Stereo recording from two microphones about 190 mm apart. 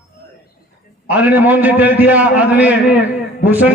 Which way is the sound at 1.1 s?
10° right (ahead or behind).